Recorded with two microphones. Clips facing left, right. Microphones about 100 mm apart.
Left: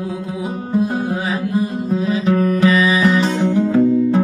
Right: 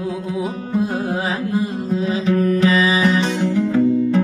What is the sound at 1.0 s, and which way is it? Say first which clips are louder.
Music: left 1 dB; 30° right (ahead or behind).